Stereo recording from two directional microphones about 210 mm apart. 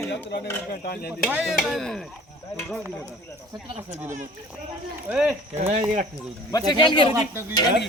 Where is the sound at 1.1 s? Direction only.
5° right (ahead or behind).